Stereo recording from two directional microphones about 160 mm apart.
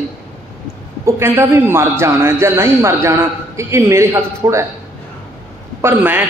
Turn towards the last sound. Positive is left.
turn(degrees=-10)  # may be behind; listen again after turning